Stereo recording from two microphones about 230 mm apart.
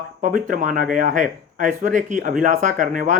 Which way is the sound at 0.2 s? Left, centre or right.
Right.